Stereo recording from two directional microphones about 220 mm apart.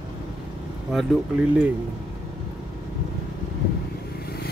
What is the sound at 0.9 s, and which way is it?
Speech, centre (ahead or behind).